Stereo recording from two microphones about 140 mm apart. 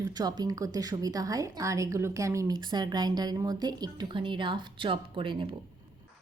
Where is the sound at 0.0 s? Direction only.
30° right (ahead or behind).